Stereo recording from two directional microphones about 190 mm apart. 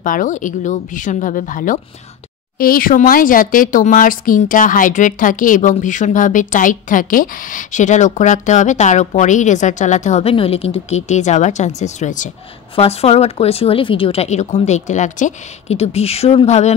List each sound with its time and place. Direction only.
0.0 s a woman's voice: 45° left (ahead or behind)